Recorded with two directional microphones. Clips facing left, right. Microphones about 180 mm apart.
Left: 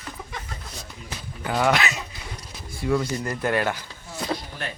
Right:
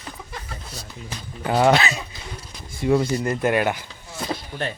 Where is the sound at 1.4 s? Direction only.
30° right (ahead or behind).